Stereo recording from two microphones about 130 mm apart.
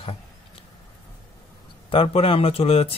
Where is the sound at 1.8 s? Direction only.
45° left (ahead or behind).